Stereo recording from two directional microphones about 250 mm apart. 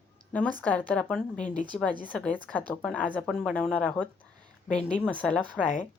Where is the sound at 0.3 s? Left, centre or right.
Centre.